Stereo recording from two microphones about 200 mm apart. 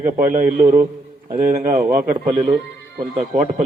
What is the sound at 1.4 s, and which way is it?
Speech, 10° right (ahead or behind).